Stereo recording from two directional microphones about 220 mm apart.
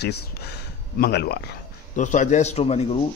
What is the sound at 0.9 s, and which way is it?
Speech, 45° left (ahead or behind).